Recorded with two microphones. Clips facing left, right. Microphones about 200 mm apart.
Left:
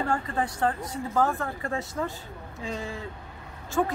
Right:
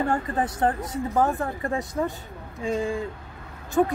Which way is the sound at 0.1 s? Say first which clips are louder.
Right 3 dB; 20° right (ahead or behind).